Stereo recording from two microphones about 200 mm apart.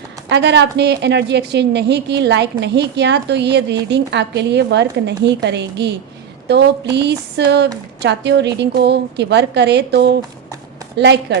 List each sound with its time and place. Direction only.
0.3 s a woman's voice: 60° right (ahead or behind)